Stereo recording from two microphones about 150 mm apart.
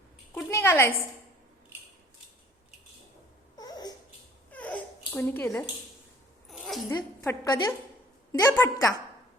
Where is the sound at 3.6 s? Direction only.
25° left (ahead or behind).